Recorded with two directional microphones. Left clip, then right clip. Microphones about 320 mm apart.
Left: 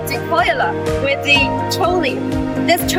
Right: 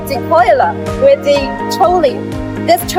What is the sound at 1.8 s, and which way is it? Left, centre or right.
Speech, centre.